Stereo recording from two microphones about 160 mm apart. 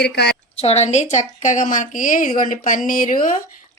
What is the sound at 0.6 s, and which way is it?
A woman's voice, 40° left (ahead or behind).